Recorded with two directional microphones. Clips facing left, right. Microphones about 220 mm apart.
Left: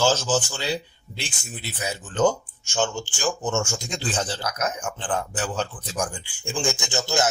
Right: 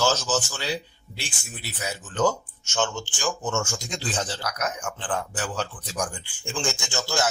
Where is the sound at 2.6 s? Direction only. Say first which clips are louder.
Left 2 dB; 10° left (ahead or behind).